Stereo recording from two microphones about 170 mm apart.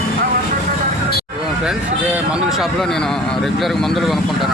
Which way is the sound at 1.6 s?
5° right (ahead or behind).